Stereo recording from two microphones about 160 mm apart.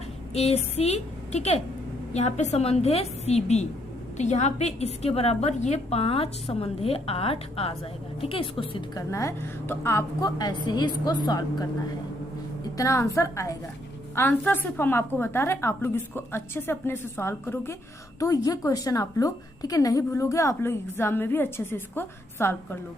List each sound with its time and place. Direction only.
0.3 s a woman's voice: 40° left (ahead or behind)
9.0 s a woman's voice: 20° left (ahead or behind)
12.7 s a woman's voice: 20° left (ahead or behind)